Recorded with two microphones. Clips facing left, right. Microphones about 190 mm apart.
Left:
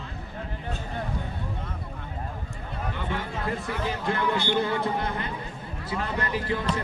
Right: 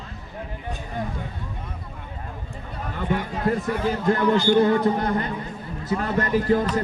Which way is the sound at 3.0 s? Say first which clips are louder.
Right 8 dB; 40° right (ahead or behind).